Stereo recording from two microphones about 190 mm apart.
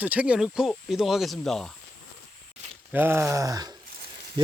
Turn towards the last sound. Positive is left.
turn(degrees=-20)  # may be behind; listen again after turning